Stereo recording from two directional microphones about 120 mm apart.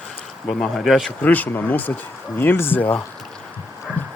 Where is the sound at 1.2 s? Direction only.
15° left (ahead or behind).